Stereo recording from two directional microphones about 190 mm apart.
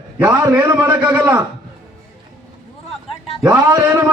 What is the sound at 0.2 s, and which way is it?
A man's voice, 10° right (ahead or behind).